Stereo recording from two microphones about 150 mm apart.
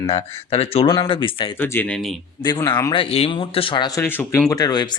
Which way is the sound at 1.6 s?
15° left (ahead or behind).